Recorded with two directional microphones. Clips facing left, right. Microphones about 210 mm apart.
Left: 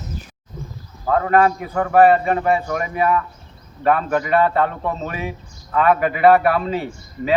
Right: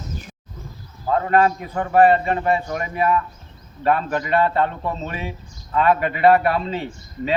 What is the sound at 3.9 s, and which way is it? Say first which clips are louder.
A man's voice: left 3 dB; 30° right (ahead or behind).